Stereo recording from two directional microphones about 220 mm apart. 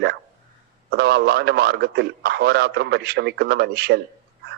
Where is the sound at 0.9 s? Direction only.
50° right (ahead or behind).